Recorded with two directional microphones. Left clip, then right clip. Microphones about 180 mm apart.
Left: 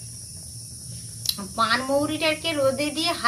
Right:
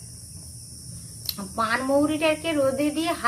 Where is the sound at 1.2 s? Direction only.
15° right (ahead or behind).